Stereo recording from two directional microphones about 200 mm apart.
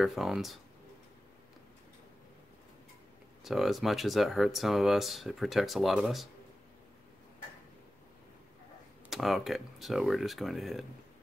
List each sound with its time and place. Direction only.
0.0 s speech: centre (ahead or behind)
3.4 s speech: centre (ahead or behind)
9.1 s speech: centre (ahead or behind)